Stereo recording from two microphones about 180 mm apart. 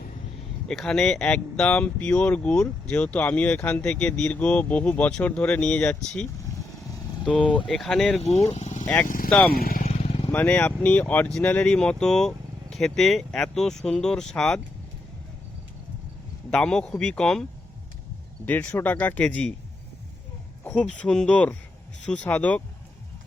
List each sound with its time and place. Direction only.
0.7 s speech: 5° left (ahead or behind)
7.7 s speech: 5° left (ahead or behind)
8.2 s speech: 35° left (ahead or behind); by 9.8 s 55° left (ahead or behind)
9.8 s motorcycle: 35° left (ahead or behind)
10.2 s speech: 10° left (ahead or behind)
16.5 s speech: 5° left (ahead or behind)
18.4 s speech: 10° left (ahead or behind)
20.7 s speech: 5° left (ahead or behind)